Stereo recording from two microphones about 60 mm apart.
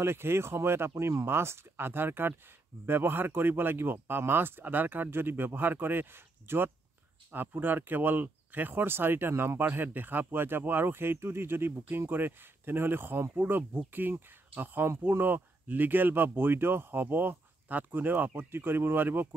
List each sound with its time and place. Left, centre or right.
0.0 s speech: right
9.3 s speech: right
9.6 s speech: right